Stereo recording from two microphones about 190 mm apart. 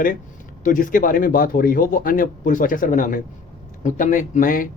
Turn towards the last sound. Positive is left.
turn(degrees=45)  # may be behind; listen again after turning